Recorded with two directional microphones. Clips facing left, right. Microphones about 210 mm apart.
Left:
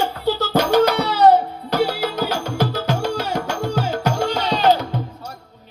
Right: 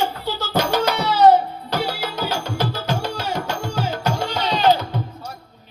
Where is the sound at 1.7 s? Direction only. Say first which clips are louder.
Left 5 dB; 55° left (ahead or behind).